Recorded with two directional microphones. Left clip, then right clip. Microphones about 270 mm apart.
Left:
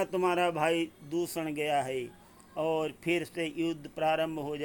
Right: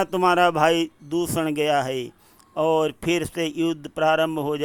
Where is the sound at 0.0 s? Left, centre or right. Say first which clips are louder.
Right 10 dB; centre.